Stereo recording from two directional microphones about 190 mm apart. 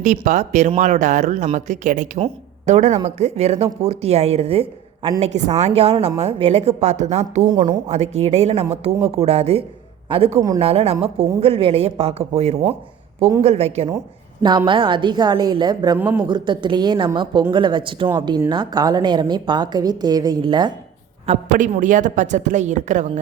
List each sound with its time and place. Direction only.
0.0 s speech: 40° right (ahead or behind)
7.4 s a woman's voice: 20° right (ahead or behind)
7.9 s speech: 35° right (ahead or behind)
14.4 s a woman's voice: 25° right (ahead or behind)
21.2 s speech: 40° right (ahead or behind)